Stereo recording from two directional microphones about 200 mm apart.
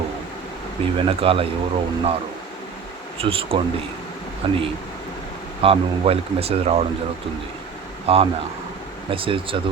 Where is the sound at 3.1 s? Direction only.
30° right (ahead or behind).